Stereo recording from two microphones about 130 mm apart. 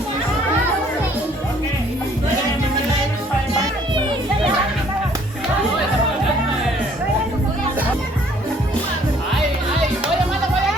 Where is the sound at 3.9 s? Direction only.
40° right (ahead or behind).